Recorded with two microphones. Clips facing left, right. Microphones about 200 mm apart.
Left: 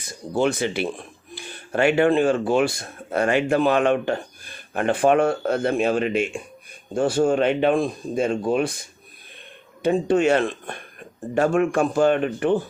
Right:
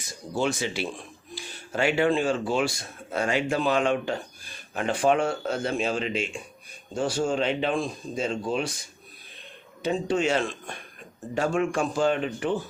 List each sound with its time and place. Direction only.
0.3 s speech: 55° left (ahead or behind)